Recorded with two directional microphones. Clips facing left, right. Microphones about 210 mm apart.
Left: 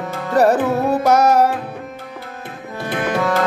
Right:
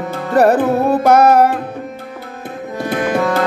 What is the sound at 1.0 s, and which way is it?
Music, 55° right (ahead or behind).